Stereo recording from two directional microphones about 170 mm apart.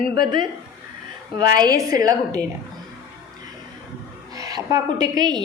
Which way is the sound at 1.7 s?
20° right (ahead or behind).